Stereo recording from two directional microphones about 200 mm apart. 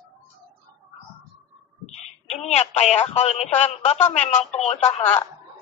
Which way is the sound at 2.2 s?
35° left (ahead or behind).